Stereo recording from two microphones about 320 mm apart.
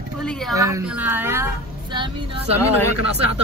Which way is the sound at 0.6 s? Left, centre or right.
Centre.